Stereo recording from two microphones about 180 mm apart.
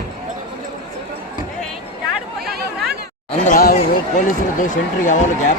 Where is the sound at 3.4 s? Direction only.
50° left (ahead or behind).